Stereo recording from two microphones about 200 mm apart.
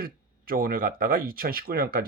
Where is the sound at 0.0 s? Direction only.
45° right (ahead or behind).